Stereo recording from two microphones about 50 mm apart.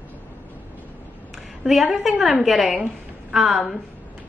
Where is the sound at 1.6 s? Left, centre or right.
Centre.